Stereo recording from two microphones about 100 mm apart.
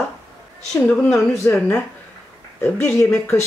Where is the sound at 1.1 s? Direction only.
25° left (ahead or behind).